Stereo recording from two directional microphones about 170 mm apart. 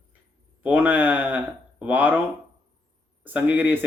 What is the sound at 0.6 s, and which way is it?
A man's voice, 10° right (ahead or behind).